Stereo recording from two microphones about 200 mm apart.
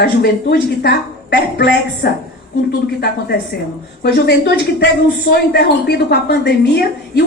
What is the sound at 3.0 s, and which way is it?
A woman's voice, 55° left (ahead or behind).